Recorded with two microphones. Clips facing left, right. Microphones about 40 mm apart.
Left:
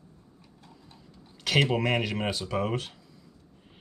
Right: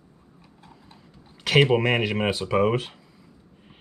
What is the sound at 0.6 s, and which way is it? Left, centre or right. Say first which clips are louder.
Clip-clop: right 3 dB; centre.